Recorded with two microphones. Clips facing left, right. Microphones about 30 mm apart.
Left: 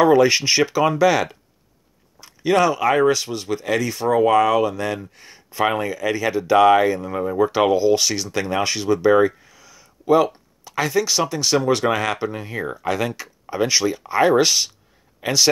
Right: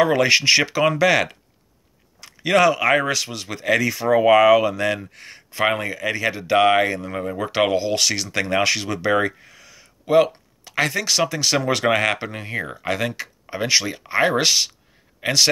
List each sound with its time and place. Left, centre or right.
0.0 s speech: right
4.0 s speech: centre
4.7 s speech: right
5.2 s speech: right
7.6 s speech: right
8.3 s speech: right
8.6 s speech: right
9.1 s a sound: right
10.6 s speech: right
11.3 s speech: right
11.8 s speech: right
13.1 s a sound: right
13.7 s speech: right